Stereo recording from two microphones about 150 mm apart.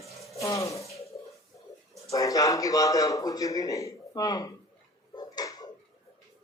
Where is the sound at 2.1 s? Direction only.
20° left (ahead or behind).